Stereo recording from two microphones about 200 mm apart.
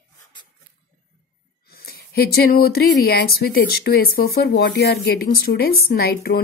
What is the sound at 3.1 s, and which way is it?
A woman's voice, 50° left (ahead or behind).